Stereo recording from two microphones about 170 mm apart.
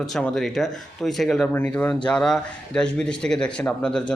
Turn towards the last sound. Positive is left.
turn(degrees=5)  # may be behind; listen again after turning